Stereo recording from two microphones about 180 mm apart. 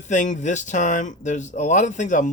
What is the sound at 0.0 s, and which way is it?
Speech, 45° left (ahead or behind).